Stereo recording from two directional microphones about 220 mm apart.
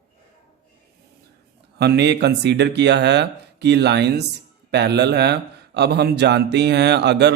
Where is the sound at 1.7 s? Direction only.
50° right (ahead or behind).